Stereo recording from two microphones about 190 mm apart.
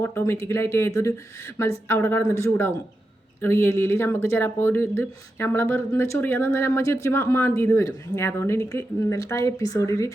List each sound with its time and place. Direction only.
0.3 s speech: 15° left (ahead or behind)